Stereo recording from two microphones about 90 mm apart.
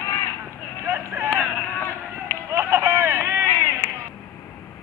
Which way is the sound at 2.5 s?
30° right (ahead or behind).